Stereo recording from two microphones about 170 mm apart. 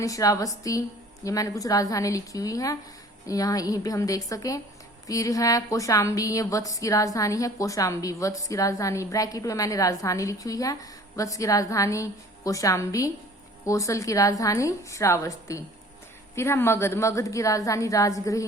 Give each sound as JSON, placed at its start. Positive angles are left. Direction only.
{"t": 0.0, "sound": "a woman's voice", "side_deg": 20}